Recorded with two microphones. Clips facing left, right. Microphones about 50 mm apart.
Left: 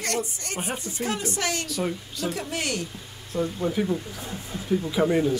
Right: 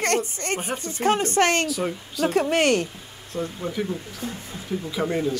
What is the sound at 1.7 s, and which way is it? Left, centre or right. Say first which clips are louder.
Speech: right 2 dB; centre.